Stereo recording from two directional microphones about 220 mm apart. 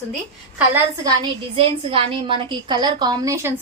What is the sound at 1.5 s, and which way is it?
A woman's voice, 25° right (ahead or behind).